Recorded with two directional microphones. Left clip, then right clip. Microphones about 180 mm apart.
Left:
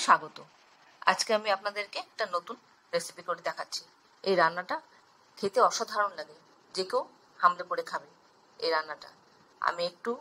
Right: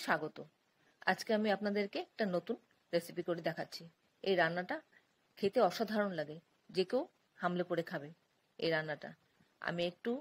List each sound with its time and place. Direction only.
0.0 s a woman's voice: 20° right (ahead or behind)